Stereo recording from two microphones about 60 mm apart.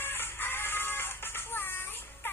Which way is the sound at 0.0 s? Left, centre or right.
Left.